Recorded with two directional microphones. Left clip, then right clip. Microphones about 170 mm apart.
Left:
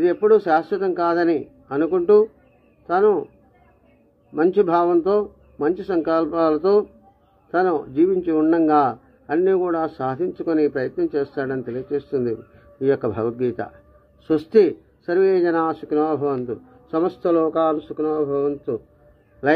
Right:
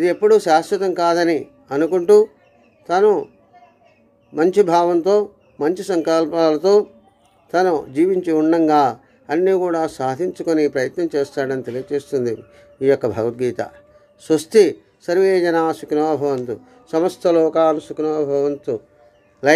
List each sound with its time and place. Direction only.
0.0 s a man's voice: 35° right (ahead or behind)
4.4 s a man's voice: 35° right (ahead or behind)